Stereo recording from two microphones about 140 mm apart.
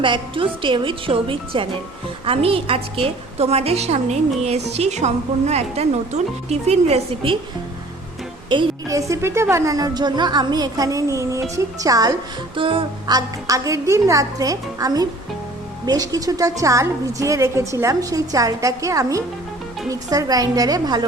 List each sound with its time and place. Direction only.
0.0 s a woman's voice: 35° right (ahead or behind)
8.4 s a woman's voice: 30° right (ahead or behind)
12.5 s a woman's voice: 40° right (ahead or behind)